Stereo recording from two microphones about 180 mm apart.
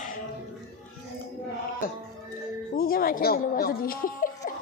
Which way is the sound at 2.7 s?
55° left (ahead or behind).